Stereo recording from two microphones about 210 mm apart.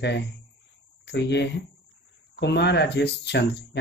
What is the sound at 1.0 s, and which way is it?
Speech, 55° left (ahead or behind).